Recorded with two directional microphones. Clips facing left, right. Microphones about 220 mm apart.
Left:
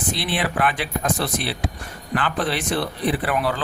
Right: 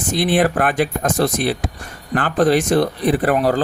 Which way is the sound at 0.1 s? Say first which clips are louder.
Right 9 dB; 45° right (ahead or behind).